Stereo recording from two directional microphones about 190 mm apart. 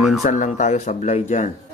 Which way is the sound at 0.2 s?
40° left (ahead or behind).